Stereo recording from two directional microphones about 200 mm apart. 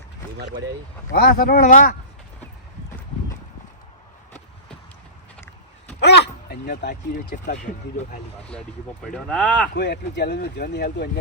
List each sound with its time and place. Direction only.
1.1 s speech: 50° left (ahead or behind)
6.0 s speech: 55° left (ahead or behind)
9.1 s speech: 5° left (ahead or behind)
9.7 s speech: 55° left (ahead or behind)